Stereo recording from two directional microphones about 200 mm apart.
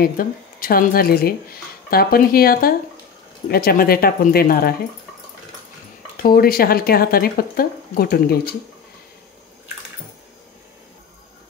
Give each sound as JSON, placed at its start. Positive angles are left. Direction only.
{"t": 0.0, "sound": "speech", "side_deg": 45}
{"t": 6.2, "sound": "speech", "side_deg": 50}